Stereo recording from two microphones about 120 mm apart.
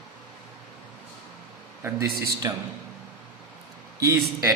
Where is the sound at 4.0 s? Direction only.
25° right (ahead or behind).